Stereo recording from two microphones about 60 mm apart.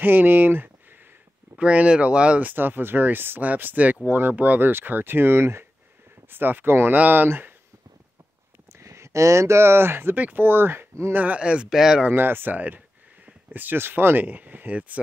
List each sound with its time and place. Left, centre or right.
0.0 s speech: right
1.6 s speech: centre
2.5 s speech: right
8.7 s speech: right
11.1 s speech: right
11.7 s speech: centre
12.1 s speech: right